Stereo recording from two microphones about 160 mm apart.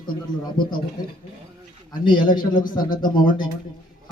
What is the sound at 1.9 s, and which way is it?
A man's voice, 25° left (ahead or behind).